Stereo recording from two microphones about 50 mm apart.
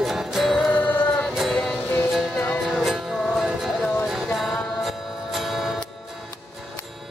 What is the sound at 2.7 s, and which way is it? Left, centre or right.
Music, centre.